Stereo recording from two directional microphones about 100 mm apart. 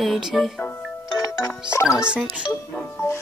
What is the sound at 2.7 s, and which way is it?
Music, 20° left (ahead or behind).